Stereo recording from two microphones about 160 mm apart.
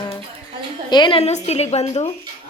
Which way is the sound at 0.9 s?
30° left (ahead or behind).